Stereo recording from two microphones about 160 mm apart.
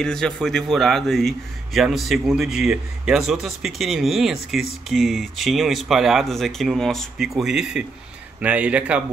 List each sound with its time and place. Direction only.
0.0 s a man's voice: 5° left (ahead or behind)